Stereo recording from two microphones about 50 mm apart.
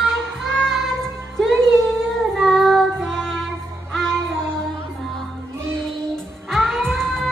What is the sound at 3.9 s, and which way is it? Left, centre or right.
Music, centre.